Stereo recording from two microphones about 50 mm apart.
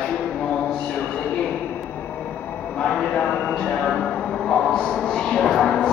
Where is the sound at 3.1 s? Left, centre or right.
Left.